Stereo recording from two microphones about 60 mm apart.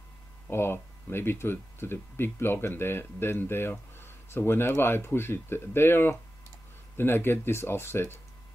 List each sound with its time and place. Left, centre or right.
0.5 s speech: left